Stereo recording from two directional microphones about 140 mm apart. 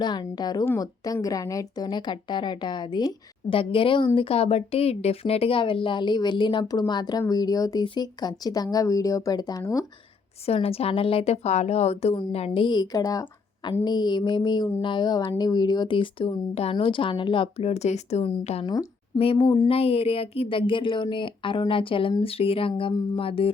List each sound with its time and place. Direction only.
0.0 s a woman's voice: 30° left (ahead or behind)
10.4 s a woman's voice: 45° left (ahead or behind)
12.6 s a woman's voice: 30° left (ahead or behind); by 18.6 s 45° left (ahead or behind)
18.6 s a woman's voice: 25° left (ahead or behind)
19.2 s a woman's voice: 40° left (ahead or behind)